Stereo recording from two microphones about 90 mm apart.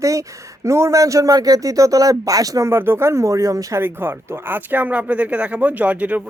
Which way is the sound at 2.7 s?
25° right (ahead or behind).